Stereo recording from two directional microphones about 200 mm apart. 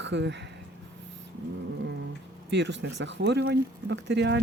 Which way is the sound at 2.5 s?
60° right (ahead or behind).